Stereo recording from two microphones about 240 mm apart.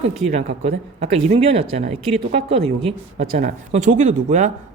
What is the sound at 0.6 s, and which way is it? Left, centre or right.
A woman's voice, right.